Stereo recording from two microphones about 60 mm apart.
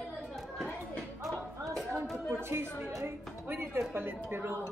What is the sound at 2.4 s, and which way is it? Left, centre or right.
A woman's voice, right.